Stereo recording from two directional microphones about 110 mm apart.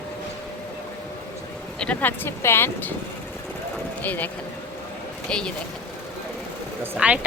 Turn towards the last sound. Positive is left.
turn(degrees=-10)  # may be behind; listen again after turning